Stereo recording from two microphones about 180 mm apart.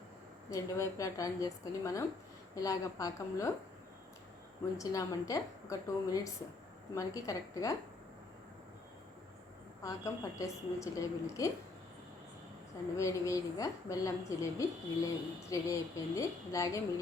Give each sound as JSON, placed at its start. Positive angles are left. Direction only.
{"t": 0.5, "sound": "a woman's voice", "side_deg": 20}
{"t": 4.8, "sound": "a woman's voice", "side_deg": 20}
{"t": 9.8, "sound": "a woman's voice", "side_deg": 15}
{"t": 13.0, "sound": "a woman's voice", "side_deg": 15}